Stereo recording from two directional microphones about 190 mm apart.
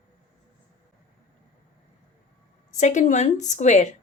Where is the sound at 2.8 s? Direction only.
40° left (ahead or behind).